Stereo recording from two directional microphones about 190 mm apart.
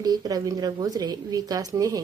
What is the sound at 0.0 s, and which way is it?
A woman's voice, 20° right (ahead or behind).